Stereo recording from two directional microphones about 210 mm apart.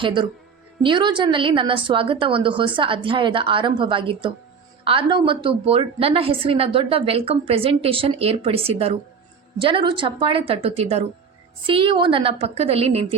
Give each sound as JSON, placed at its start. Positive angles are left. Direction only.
{"t": 0.0, "sound": "a woman's voice", "side_deg": -20}